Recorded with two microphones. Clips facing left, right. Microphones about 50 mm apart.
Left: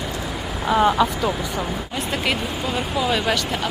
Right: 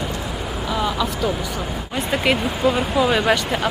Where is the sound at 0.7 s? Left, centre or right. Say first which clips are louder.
Left 6 dB; left.